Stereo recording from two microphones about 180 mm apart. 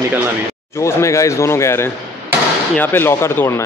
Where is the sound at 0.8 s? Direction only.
15° left (ahead or behind).